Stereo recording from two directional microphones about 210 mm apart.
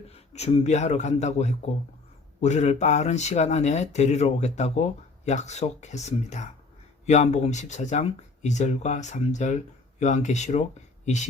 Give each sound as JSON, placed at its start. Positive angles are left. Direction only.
{"t": 0.3, "sound": "speech", "side_deg": 30}